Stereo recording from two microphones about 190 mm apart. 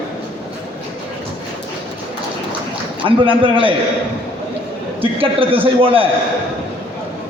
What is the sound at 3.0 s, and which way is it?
Speech, 25° right (ahead or behind).